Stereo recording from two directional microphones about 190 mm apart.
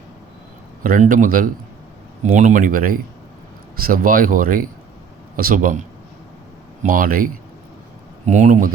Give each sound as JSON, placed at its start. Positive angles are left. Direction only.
{"t": 0.8, "sound": "speech", "side_deg": -45}
{"t": 6.8, "sound": "speech", "side_deg": -50}
{"t": 8.3, "sound": "speech", "side_deg": -40}